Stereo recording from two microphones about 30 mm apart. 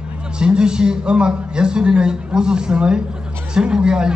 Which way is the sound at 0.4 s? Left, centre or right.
Right.